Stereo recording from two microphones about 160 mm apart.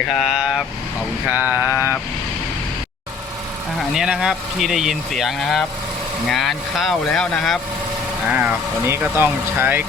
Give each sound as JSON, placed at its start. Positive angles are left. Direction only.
{"t": 0.1, "sound": "speech", "side_deg": 0}
{"t": 3.8, "sound": "speech", "side_deg": -5}
{"t": 8.3, "sound": "speech", "side_deg": -10}